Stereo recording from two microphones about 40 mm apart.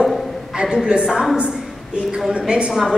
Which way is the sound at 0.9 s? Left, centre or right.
Right.